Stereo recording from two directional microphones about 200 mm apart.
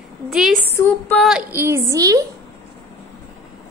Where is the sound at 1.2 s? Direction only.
5° right (ahead or behind).